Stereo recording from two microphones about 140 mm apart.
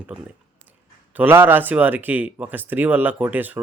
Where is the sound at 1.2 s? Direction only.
15° right (ahead or behind).